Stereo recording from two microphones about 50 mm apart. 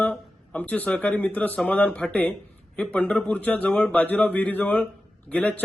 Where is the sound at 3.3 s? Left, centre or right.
Left.